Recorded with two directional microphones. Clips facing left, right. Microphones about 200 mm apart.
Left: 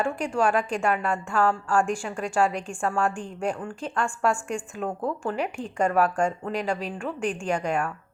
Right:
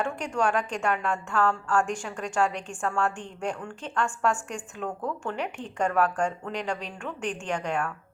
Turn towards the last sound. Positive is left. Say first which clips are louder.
# left 3 dB
turn(degrees=10)  # may be behind; listen again after turning